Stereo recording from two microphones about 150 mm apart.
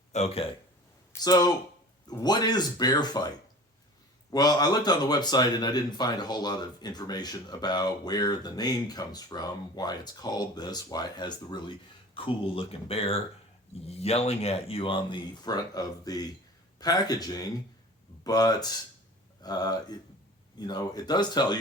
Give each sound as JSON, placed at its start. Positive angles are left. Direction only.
{"t": 0.1, "sound": "speech", "side_deg": 45}
{"t": 1.2, "sound": "speech", "side_deg": 25}